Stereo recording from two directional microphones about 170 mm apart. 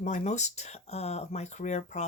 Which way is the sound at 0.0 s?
45° left (ahead or behind).